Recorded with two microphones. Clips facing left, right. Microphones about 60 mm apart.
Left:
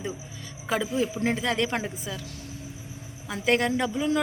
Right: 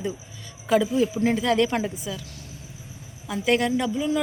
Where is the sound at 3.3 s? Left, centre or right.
Left.